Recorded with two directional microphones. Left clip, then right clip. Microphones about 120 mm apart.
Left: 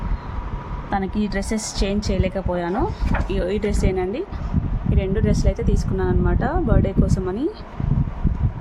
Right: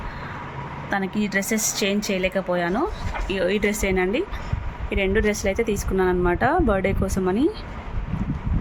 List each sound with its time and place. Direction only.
0.9 s speech: 20° left (ahead or behind); by 4.2 s 5° left (ahead or behind)
4.9 s speech: 10° right (ahead or behind)